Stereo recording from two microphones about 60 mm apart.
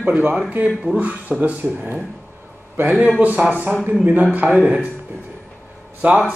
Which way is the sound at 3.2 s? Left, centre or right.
Right.